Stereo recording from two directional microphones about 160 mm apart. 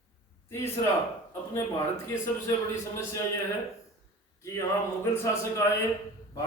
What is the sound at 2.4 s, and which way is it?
Speech, 20° left (ahead or behind).